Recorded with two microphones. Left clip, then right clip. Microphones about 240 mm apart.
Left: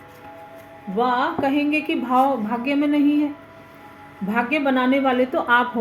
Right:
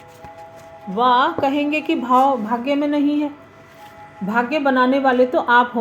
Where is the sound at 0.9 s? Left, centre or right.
Right.